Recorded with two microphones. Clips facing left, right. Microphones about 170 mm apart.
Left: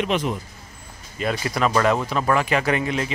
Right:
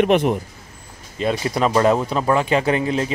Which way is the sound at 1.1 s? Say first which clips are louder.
Right 4 dB; 25° right (ahead or behind).